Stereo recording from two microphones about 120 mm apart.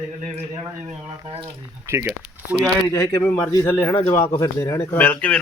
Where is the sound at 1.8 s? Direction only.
20° right (ahead or behind).